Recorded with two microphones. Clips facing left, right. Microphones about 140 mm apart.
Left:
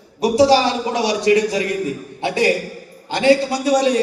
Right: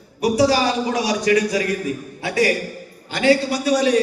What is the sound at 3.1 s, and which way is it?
Speech, 25° left (ahead or behind).